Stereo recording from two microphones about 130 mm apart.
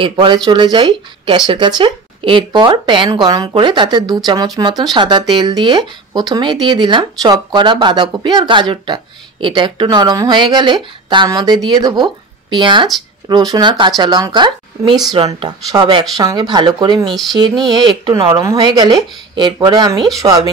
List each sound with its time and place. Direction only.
0.0 s speech: 35° right (ahead or behind)
17.0 s speech: centre (ahead or behind)
17.7 s speech: 35° right (ahead or behind)